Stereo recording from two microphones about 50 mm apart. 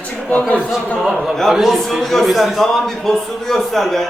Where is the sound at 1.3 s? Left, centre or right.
Centre.